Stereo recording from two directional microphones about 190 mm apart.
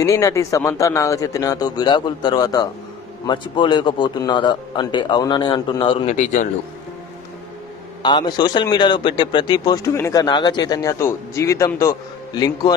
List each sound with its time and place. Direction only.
0.0 s a man's voice: 15° left (ahead or behind); by 6.5 s 40° left (ahead or behind)
8.0 s speech: 25° left (ahead or behind)